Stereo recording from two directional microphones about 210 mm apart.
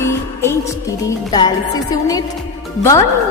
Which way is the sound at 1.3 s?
20° left (ahead or behind).